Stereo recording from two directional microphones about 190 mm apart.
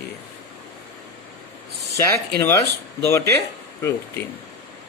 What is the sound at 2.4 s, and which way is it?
Speech, 15° left (ahead or behind).